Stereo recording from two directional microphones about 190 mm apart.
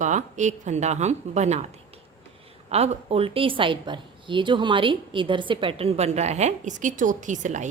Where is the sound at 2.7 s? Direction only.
35° right (ahead or behind).